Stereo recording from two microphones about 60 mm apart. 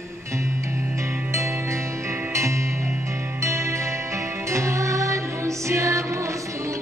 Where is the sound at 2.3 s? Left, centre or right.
Right.